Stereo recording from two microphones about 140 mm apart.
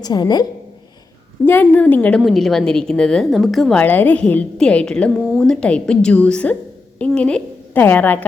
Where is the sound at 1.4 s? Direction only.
15° left (ahead or behind).